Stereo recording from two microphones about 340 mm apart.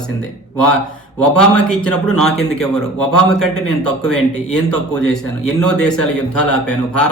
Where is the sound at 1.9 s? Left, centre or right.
Left.